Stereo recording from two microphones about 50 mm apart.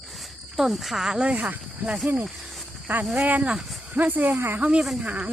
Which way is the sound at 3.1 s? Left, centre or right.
Right.